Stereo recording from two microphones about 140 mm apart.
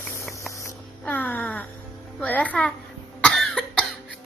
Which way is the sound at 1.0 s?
10° left (ahead or behind).